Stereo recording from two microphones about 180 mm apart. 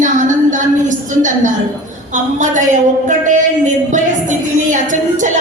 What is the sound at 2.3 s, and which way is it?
Speech, 45° right (ahead or behind).